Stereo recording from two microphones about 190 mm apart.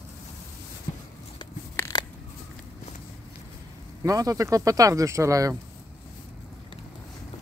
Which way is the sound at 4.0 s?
20° right (ahead or behind).